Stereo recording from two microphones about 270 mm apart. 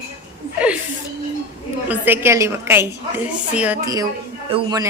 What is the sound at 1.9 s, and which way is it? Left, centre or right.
Speech, centre.